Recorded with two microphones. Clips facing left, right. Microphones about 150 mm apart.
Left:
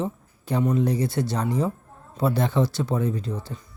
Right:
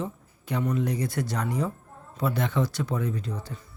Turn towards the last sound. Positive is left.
turn(degrees=30)  # may be behind; listen again after turning